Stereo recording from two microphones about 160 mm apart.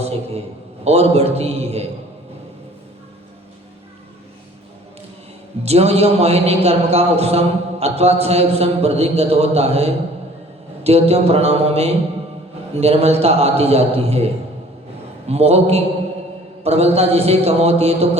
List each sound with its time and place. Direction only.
0.9 s a man's voice: 40° right (ahead or behind)
5.6 s a man's voice: 40° right (ahead or behind)
15.3 s a man's voice: 40° right (ahead or behind)